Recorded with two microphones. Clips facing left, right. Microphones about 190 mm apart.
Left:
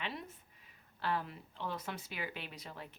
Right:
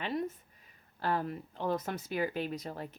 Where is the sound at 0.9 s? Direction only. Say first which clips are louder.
Right 5 dB; 45° right (ahead or behind).